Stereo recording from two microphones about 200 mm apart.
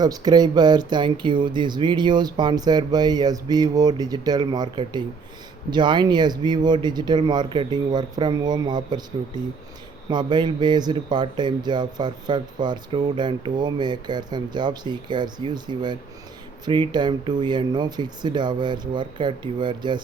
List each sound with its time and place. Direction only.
0.0 s speech: 20° right (ahead or behind)